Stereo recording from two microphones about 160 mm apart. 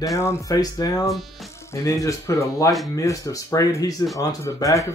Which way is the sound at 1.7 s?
20° left (ahead or behind).